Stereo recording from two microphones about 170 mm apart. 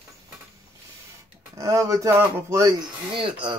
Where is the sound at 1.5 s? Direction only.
20° right (ahead or behind).